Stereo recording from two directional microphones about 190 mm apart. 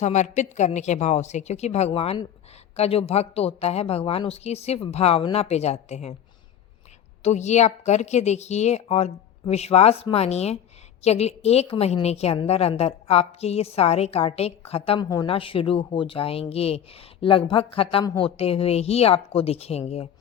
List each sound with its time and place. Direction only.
0.0 s a woman's voice: 40° left (ahead or behind)
7.2 s a woman's voice: 35° left (ahead or behind)